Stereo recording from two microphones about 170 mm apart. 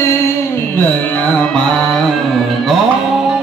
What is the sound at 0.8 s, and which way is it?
Carnatic music, 10° left (ahead or behind).